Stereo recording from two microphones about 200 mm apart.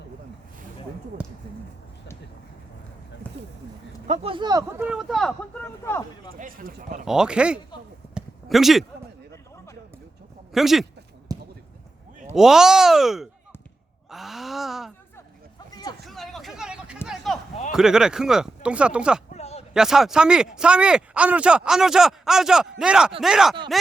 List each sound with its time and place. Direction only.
1.2 s speech: 5° right (ahead or behind)
4.0 s speech: 30° right (ahead or behind)
4.8 s speech: 5° right (ahead or behind); by 6.1 s 10° left (ahead or behind)
6.3 s speech: 45° right (ahead or behind)
7.0 s speech: 5° right (ahead or behind)
8.1 s a sound: centre (ahead or behind)
10.5 s speech: centre (ahead or behind)
11.3 s basketball bounce: 20° right (ahead or behind)
12.3 s speech: centre (ahead or behind)
15.7 s a sound: 20° left (ahead or behind)
16.0 s a sound: centre (ahead or behind)
17.7 s speech: 5° right (ahead or behind)
19.4 s a sound: 30° left (ahead or behind)
19.7 s speech: 5° right (ahead or behind)